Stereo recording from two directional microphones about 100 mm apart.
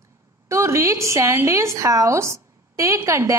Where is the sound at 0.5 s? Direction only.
30° right (ahead or behind).